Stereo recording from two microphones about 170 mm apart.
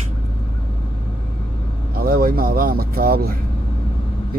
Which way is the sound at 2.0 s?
60° right (ahead or behind).